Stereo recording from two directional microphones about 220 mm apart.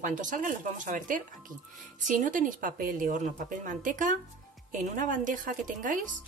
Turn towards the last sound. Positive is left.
turn(degrees=-35)  # may be behind; listen again after turning